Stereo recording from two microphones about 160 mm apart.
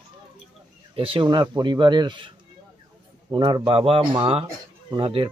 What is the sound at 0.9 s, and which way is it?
Speech, 35° right (ahead or behind).